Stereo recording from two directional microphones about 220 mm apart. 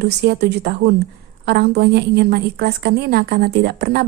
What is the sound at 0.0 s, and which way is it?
A woman's voice, 50° right (ahead or behind).